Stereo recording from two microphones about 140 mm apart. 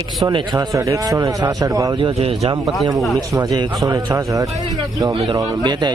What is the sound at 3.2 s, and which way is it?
A man's voice, 25° right (ahead or behind).